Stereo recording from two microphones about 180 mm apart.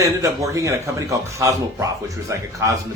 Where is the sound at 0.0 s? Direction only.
15° right (ahead or behind).